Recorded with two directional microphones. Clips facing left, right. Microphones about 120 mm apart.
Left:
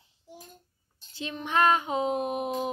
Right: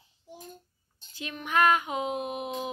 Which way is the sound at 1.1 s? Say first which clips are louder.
Even; 30° left (ahead or behind).